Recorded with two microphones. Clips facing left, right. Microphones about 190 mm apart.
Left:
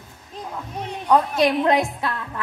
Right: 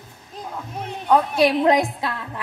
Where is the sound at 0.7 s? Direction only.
Centre (ahead or behind).